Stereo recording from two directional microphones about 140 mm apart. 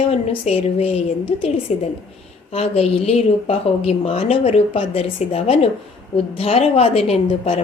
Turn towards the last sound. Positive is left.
turn(degrees=45)  # may be behind; listen again after turning